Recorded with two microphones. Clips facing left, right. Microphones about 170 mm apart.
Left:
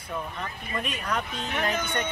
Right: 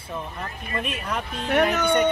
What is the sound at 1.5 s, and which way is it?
Speech, 70° right (ahead or behind).